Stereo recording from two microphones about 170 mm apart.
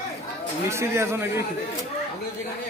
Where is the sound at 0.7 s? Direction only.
15° right (ahead or behind).